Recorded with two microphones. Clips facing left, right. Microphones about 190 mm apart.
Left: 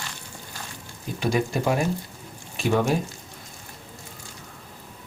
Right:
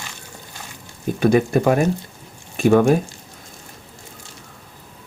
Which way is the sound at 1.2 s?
55° right (ahead or behind).